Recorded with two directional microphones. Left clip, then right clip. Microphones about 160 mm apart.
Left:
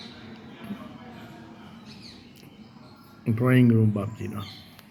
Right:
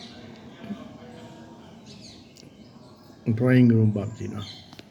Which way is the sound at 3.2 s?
15° right (ahead or behind).